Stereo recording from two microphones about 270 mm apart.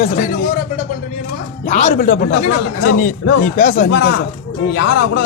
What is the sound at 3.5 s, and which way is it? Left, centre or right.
Speech, left.